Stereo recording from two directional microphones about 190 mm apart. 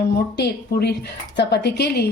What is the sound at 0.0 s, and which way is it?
Speech, 60° left (ahead or behind).